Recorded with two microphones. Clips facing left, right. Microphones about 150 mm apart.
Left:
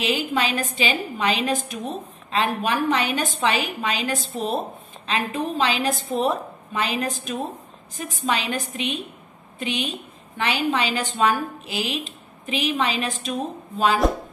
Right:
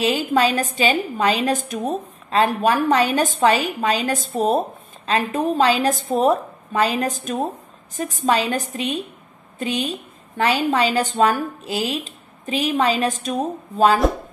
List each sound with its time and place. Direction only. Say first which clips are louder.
0.0 s a woman's voice: right 5 dB; 40° right (ahead or behind)